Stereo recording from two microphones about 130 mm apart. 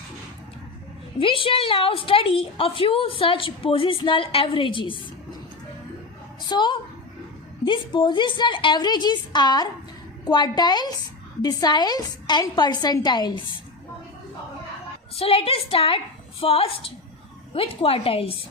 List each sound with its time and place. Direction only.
1.2 s a woman's voice: 40° left (ahead or behind)
6.5 s a woman's voice: 35° left (ahead or behind)
15.2 s a woman's voice: 45° left (ahead or behind)